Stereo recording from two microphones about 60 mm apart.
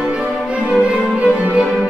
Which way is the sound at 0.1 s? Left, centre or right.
Centre.